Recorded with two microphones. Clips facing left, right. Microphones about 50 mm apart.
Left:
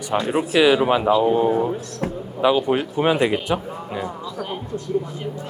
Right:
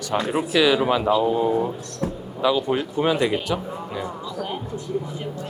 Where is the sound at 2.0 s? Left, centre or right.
Left.